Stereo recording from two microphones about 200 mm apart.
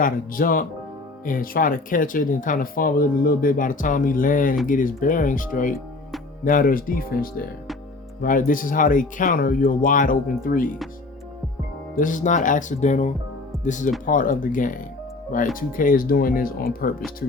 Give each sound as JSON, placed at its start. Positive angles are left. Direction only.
{"t": 0.0, "sound": "speech", "side_deg": 45}
{"t": 11.9, "sound": "speech", "side_deg": 40}